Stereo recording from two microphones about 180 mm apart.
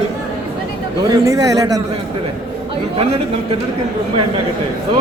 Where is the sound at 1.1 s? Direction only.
20° right (ahead or behind).